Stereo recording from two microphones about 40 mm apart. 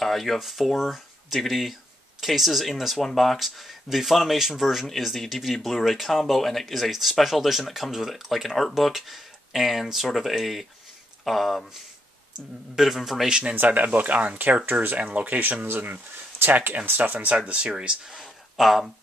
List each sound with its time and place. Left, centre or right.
0.0 s speech: centre
12.7 s a man's voice: centre
13.3 s speech: right
13.7 s speech: right
14.7 s speech: right
15.0 s speech: right
15.6 s speech: right
17.5 s speech: right
18.2 s a sound: centre